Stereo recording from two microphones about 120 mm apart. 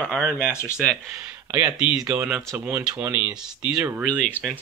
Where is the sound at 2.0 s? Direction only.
25° right (ahead or behind).